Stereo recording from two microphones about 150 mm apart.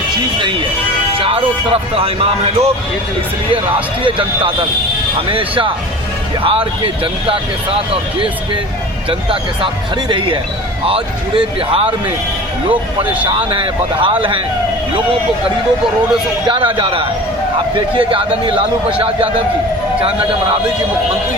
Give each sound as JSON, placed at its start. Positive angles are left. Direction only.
{"t": 1.2, "sound": "speech", "side_deg": -35}
{"t": 4.0, "sound": "speech", "side_deg": -35}
{"t": 9.0, "sound": "speech", "side_deg": -35}
{"t": 13.5, "sound": "speech", "side_deg": -35}
{"t": 16.5, "sound": "speech", "side_deg": -35}